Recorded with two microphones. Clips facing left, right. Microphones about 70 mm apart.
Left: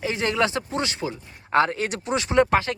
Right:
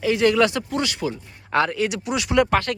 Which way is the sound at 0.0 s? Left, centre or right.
Left.